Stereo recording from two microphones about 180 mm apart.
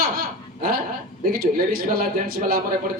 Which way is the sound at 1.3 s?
55° right (ahead or behind).